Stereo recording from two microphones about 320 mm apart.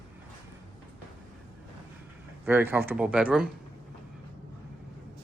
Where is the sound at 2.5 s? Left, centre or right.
Centre.